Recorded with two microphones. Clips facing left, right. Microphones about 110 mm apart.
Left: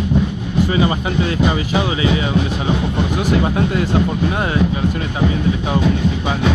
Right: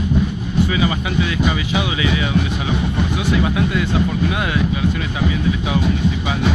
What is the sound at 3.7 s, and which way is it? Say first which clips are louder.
Speech: left 2 dB; 40° left (ahead or behind).